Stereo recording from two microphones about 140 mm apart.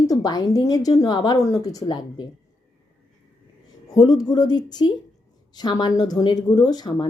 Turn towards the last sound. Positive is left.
turn(degrees=30)  # may be behind; listen again after turning